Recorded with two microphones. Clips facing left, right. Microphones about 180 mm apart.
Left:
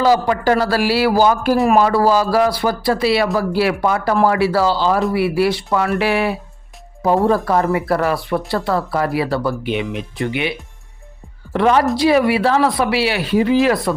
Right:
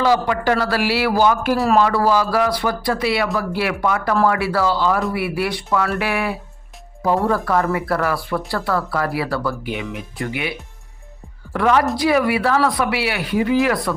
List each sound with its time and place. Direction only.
0.0 s a man's voice: 40° left (ahead or behind)
1.5 s speech: 20° left (ahead or behind)
1.8 s a man's voice: 30° left (ahead or behind)
11.5 s speech: 25° left (ahead or behind)